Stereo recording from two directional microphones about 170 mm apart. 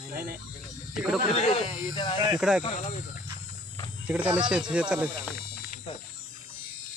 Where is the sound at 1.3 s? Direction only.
35° left (ahead or behind).